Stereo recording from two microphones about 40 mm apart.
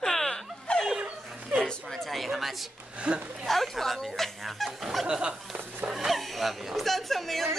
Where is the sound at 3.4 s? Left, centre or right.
Centre.